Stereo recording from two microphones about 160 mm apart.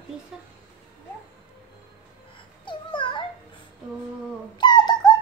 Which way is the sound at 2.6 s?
30° left (ahead or behind).